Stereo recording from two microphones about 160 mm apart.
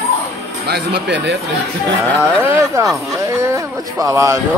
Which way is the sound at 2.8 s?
15° right (ahead or behind).